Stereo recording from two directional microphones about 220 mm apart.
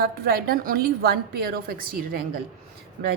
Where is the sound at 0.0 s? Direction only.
45° right (ahead or behind).